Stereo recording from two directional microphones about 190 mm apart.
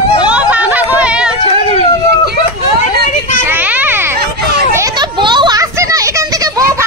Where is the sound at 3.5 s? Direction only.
10° right (ahead or behind).